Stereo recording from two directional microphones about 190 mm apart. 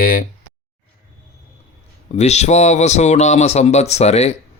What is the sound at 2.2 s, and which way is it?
Speech, 35° left (ahead or behind).